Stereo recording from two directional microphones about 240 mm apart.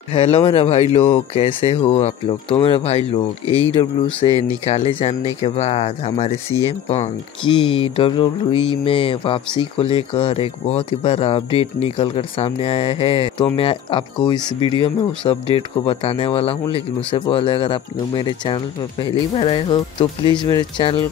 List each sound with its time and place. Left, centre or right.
0.1 s speech: left